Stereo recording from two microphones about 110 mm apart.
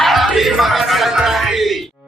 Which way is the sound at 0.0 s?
Centre (ahead or behind).